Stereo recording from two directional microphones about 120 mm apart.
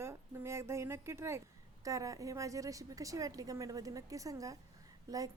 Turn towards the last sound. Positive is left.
turn(degrees=-30)  # may be behind; listen again after turning